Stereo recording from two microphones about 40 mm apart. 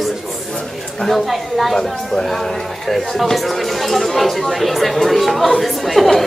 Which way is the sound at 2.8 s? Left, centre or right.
Centre.